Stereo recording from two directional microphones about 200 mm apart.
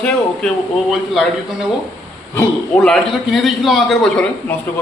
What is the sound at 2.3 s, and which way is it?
A man's voice, 5° left (ahead or behind).